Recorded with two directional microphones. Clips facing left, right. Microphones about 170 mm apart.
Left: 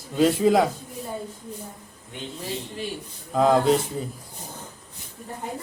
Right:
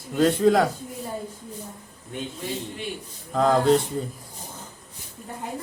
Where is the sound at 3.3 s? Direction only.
5° left (ahead or behind).